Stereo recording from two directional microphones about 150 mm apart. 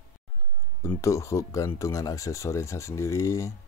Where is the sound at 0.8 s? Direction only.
20° left (ahead or behind).